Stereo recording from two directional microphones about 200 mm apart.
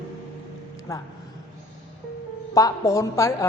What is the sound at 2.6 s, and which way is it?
Speech, 15° left (ahead or behind).